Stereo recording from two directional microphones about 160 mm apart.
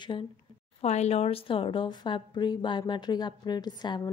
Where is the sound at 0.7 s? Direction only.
45° left (ahead or behind).